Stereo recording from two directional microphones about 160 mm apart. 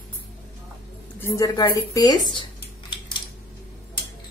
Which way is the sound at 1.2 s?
15° left (ahead or behind).